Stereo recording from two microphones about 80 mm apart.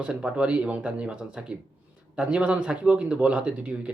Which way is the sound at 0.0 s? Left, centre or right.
Centre.